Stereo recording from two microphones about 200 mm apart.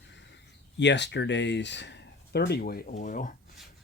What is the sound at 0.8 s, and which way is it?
Speech, 60° left (ahead or behind).